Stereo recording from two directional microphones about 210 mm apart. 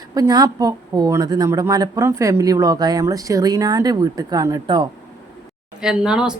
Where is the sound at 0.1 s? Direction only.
20° right (ahead or behind).